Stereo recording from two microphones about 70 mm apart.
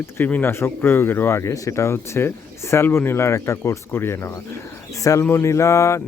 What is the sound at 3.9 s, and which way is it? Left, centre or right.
Speech, left.